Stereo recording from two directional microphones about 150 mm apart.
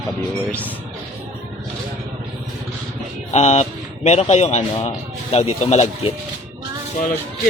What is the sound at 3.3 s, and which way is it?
A man's voice, 50° left (ahead or behind).